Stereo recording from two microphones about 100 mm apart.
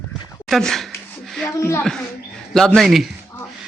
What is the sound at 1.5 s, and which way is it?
Speech, 25° left (ahead or behind).